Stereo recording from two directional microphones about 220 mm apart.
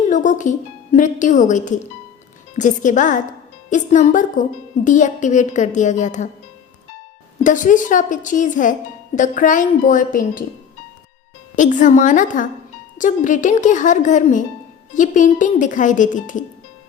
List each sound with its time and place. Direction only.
0.1 s a woman's voice: 35° left (ahead or behind)
7.4 s a woman's voice: 35° left (ahead or behind)
11.5 s a woman's voice: 35° left (ahead or behind)